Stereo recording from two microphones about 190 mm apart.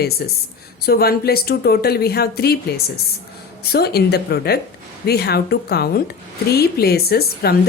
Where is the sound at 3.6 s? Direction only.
55° left (ahead or behind).